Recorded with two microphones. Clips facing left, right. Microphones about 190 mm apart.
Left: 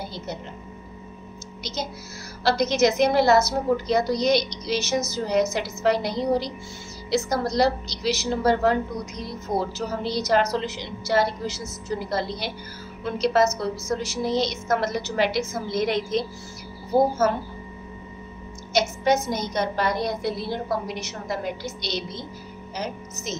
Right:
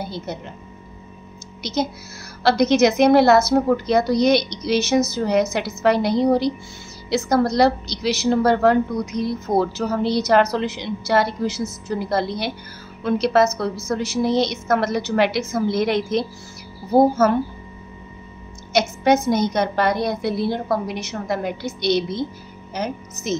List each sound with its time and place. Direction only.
1.6 s a woman's voice: 60° right (ahead or behind)
18.7 s a woman's voice: 60° right (ahead or behind)